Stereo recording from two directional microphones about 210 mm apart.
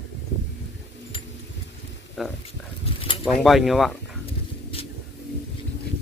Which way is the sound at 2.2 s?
Centre (ahead or behind).